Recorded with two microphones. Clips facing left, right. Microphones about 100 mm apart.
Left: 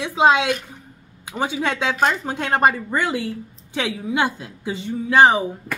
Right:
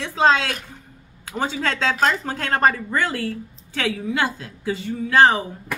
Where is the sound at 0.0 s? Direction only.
15° left (ahead or behind).